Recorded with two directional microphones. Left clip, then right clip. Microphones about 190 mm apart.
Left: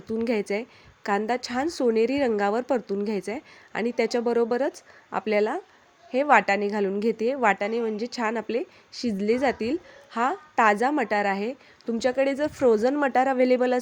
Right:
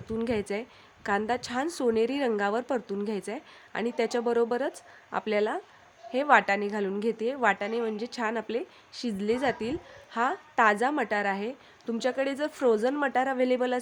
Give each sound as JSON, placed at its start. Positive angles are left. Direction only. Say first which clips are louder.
{"t": 0.1, "sound": "a woman's voice", "louder": "left 4 dB", "side_deg": 15}